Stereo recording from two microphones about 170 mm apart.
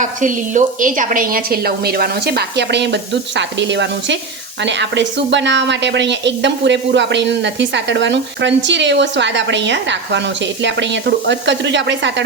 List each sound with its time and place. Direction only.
0.0 s a woman's voice: 50° right (ahead or behind); by 12.2 s 90° right